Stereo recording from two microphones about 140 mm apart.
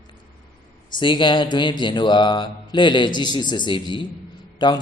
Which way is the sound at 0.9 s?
35° left (ahead or behind).